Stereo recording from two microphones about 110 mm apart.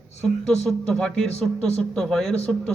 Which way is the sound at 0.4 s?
5° left (ahead or behind).